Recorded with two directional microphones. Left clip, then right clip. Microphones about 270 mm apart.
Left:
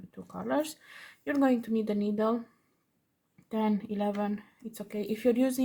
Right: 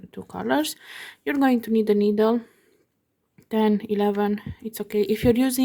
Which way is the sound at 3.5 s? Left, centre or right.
Right.